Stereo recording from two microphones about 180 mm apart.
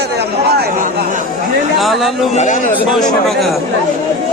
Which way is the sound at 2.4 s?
45° left (ahead or behind).